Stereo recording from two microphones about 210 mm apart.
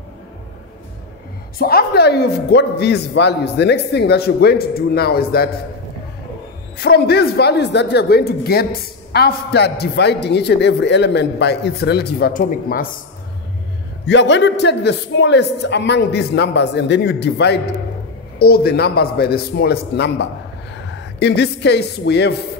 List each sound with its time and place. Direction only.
1.6 s a woman's voice: 45° left (ahead or behind)
6.8 s a woman's voice: 50° left (ahead or behind)
14.0 s a man's voice: 55° left (ahead or behind)